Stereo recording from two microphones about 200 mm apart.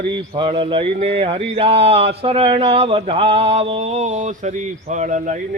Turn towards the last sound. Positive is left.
turn(degrees=-40)  # may be behind; listen again after turning